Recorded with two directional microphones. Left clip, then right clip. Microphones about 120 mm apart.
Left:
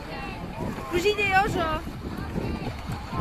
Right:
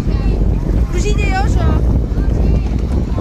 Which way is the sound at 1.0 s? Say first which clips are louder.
Right 1 dB; centre (ahead or behind).